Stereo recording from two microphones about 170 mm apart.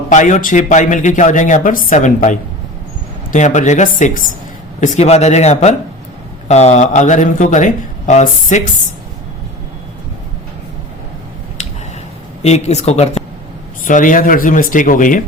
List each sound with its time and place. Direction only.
0.1 s speech: 45° left (ahead or behind)
12.4 s speech: 40° left (ahead or behind)
13.8 s speech: 50° left (ahead or behind)